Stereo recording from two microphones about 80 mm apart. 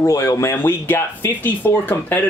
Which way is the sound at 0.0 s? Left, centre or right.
Left.